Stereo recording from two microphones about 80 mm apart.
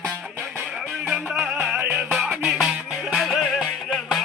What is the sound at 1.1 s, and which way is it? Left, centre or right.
Music, centre.